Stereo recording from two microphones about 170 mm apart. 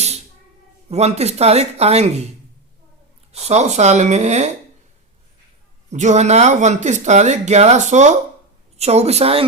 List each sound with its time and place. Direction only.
0.9 s speech: 40° right (ahead or behind)
3.3 s speech: 40° right (ahead or behind)
5.9 s speech: 45° right (ahead or behind)